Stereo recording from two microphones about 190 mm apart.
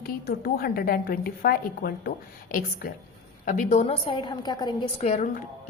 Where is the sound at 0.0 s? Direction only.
50° left (ahead or behind).